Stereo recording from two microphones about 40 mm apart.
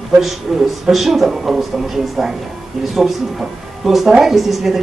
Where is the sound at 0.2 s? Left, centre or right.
Centre.